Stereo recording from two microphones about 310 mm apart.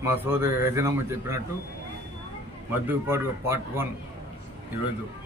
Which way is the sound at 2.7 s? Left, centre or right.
Centre.